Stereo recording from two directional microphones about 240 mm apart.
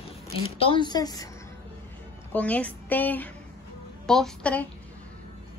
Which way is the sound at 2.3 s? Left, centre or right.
Centre.